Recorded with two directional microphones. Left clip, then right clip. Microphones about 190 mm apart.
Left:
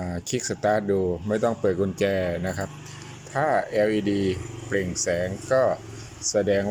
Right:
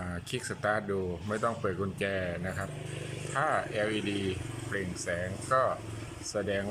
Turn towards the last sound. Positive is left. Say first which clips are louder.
# left 10 dB
turn(degrees=25)  # may be behind; listen again after turning